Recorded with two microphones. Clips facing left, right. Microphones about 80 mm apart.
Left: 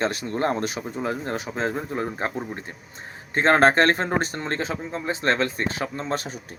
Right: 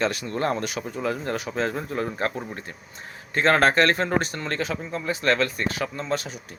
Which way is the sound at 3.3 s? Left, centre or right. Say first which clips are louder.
Left 2 dB; left.